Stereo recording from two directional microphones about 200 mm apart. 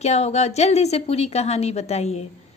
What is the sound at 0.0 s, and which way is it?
Speech, 35° left (ahead or behind).